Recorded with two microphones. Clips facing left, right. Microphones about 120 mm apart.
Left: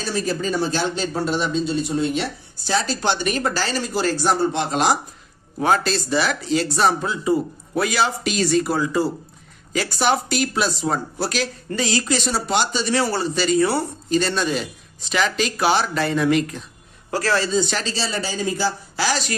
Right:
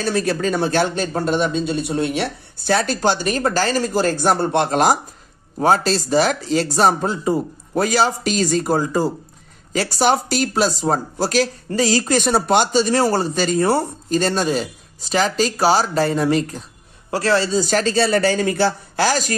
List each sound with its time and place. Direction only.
0.0 s speech: 60° right (ahead or behind)
1.9 s speech: 65° right (ahead or behind); by 4.9 s 50° right (ahead or behind)
5.6 s speech: 40° right (ahead or behind)